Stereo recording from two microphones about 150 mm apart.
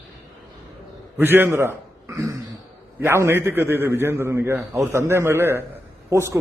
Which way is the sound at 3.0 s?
15° right (ahead or behind).